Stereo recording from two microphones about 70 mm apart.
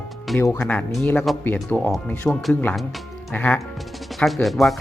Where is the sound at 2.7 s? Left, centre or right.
Centre.